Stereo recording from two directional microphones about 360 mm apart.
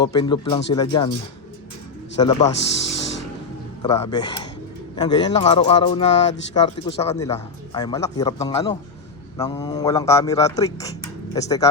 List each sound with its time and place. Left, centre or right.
0.0 s speech: centre
2.2 s speech: centre
2.6 s speech: left
3.8 s speech: centre